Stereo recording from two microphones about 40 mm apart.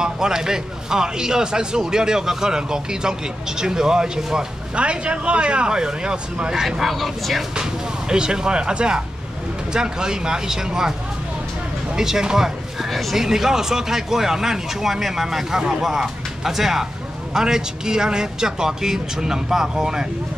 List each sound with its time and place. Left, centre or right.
0.0 s a man's voice: centre
4.7 s speech: right
6.8 s speech: centre
8.1 s a man's voice: centre